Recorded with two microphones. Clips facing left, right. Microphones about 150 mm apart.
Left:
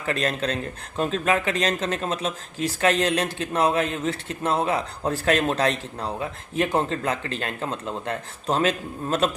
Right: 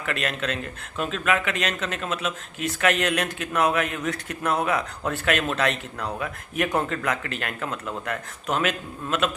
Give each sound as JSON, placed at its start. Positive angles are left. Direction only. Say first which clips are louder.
{"t": 0.0, "sound": "speech", "louder": "left 3 dB", "side_deg": 35}